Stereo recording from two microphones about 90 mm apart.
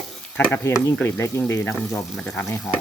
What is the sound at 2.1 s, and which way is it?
Speech, 10° left (ahead or behind).